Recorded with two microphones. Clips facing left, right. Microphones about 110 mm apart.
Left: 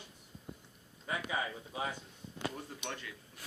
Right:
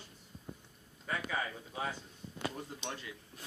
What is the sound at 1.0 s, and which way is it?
Speech, 10° left (ahead or behind).